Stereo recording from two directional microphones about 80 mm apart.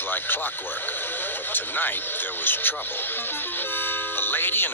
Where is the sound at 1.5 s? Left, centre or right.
Left.